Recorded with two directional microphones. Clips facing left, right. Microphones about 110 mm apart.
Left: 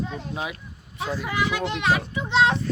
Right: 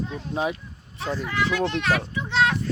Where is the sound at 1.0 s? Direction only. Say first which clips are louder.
Even; 10° left (ahead or behind).